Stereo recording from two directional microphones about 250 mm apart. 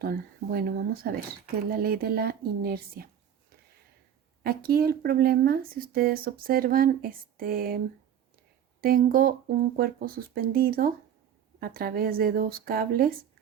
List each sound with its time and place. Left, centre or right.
0.0 s speech: right
4.4 s speech: right
8.8 s speech: right